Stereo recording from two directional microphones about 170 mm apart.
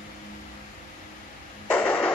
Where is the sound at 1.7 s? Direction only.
10° left (ahead or behind).